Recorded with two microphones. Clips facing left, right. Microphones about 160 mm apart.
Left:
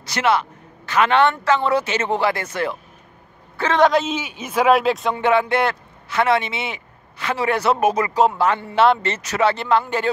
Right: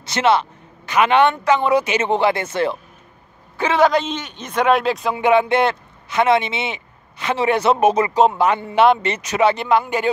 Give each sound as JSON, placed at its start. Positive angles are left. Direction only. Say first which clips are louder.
{"t": 0.0, "sound": "speech", "louder": "right 2 dB", "side_deg": -25}
{"t": 3.7, "sound": "a man's voice", "louder": "even", "side_deg": 0}
{"t": 5.2, "sound": "speech", "louder": "right 3 dB", "side_deg": -20}